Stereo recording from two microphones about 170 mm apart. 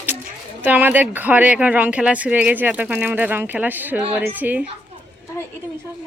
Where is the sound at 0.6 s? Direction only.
10° right (ahead or behind).